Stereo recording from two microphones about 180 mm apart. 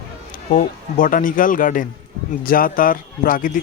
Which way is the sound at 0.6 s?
50° left (ahead or behind).